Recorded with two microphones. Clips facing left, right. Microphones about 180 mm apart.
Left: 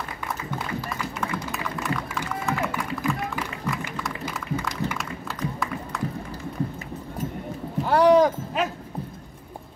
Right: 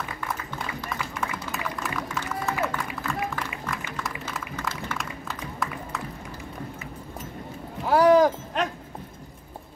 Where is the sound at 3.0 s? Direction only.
10° left (ahead or behind).